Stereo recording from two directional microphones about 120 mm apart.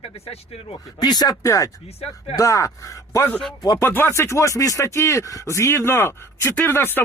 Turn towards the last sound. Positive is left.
turn(degrees=20)  # may be behind; listen again after turning